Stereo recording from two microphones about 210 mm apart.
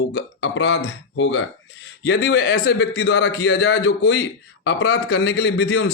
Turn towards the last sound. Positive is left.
turn(degrees=55)  # may be behind; listen again after turning